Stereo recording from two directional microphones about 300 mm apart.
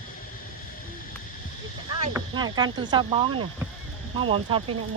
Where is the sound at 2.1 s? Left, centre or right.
Centre.